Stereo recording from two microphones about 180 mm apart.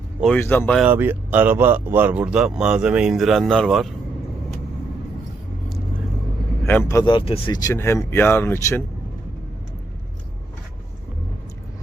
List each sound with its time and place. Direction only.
0.3 s speech: 10° left (ahead or behind)
0.8 s speech: 10° right (ahead or behind)
6.7 s speech: 10° left (ahead or behind)
7.0 s speech: 30° left (ahead or behind); by 8.8 s 10° left (ahead or behind)